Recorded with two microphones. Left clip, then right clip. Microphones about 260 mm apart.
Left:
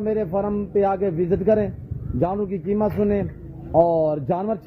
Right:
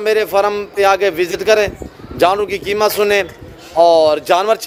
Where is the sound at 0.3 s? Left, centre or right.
Centre.